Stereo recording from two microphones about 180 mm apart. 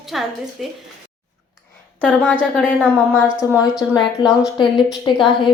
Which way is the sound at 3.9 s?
20° left (ahead or behind).